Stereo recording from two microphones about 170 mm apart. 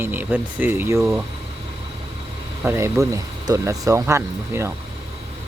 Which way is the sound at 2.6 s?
15° right (ahead or behind).